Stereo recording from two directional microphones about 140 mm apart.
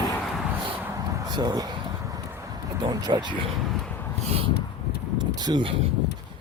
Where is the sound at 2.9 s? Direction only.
30° right (ahead or behind).